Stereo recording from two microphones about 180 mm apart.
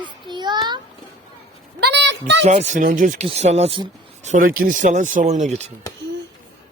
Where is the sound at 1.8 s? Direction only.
75° right (ahead or behind).